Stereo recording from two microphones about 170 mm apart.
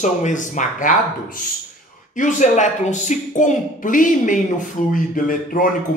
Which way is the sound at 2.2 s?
45° left (ahead or behind).